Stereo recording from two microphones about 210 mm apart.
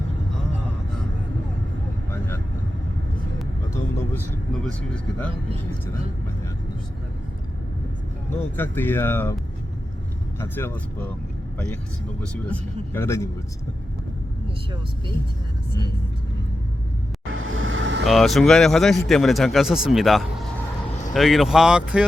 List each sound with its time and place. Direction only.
2.0 s vehicle: 10° left (ahead or behind)
3.7 s vehicle: 15° left (ahead or behind)
4.8 s a man's voice: 5° left (ahead or behind)
8.3 s speech: 10° left (ahead or behind)
10.4 s speech: 10° left (ahead or behind)
12.2 s speech: 5° left (ahead or behind)
17.3 s vehicle: 70° right (ahead or behind)
18.0 s a man's voice: centre (ahead or behind)